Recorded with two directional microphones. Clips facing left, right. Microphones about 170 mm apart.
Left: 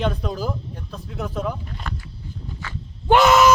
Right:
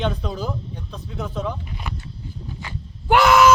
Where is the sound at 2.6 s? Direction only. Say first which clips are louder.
Left 1 dB; 15° right (ahead or behind).